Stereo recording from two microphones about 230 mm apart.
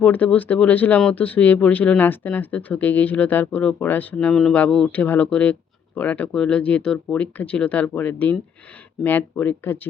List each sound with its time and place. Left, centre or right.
0.0 s speech: centre